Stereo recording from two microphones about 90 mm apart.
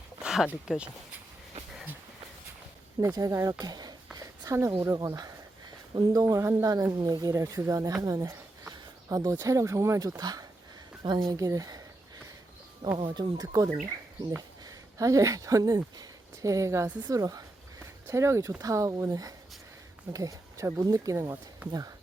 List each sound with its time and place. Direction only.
0.2 s speech: 10° right (ahead or behind)
3.0 s speech: 40° right (ahead or behind)
3.6 s a sound: 45° right (ahead or behind)
4.8 s speech: 35° right (ahead or behind)
6.2 s speech: 30° right (ahead or behind)
13.0 s speech: 60° right (ahead or behind); by 21.9 s 45° right (ahead or behind)